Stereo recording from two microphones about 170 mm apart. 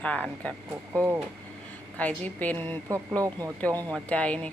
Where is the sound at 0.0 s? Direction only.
5° left (ahead or behind).